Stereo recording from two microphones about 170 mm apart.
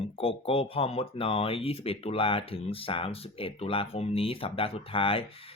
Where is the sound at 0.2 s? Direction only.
35° left (ahead or behind).